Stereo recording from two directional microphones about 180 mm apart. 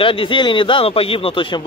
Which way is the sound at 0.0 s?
30° left (ahead or behind).